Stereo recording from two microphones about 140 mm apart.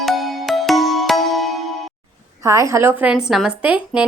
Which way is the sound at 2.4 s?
20° right (ahead or behind).